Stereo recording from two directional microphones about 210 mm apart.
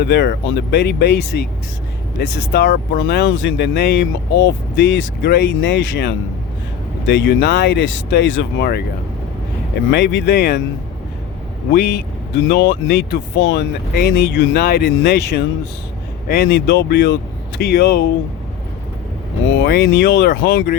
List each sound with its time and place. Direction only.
0.0 s speech: 50° left (ahead or behind)
9.9 s speech: 55° left (ahead or behind)
11.7 s speech: 50° left (ahead or behind)
19.6 s speech: 50° left (ahead or behind)